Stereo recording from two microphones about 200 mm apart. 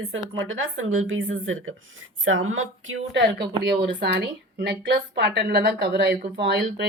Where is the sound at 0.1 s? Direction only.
75° right (ahead or behind).